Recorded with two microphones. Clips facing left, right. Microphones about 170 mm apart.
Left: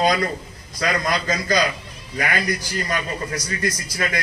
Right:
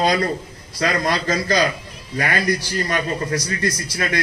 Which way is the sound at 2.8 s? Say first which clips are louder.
Right 4 dB; 35° right (ahead or behind).